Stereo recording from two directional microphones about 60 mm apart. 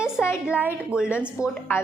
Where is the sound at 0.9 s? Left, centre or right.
Centre.